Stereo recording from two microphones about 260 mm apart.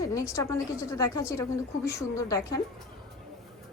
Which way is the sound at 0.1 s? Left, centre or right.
Centre.